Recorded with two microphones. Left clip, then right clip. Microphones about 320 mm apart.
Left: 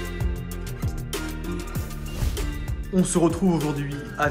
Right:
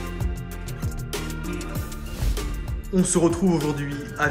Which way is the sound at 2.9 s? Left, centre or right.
Centre.